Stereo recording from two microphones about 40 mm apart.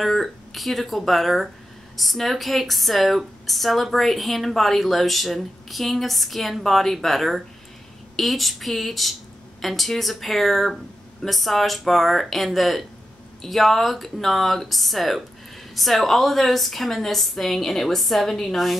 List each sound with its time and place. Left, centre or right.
0.0 s a woman's voice: centre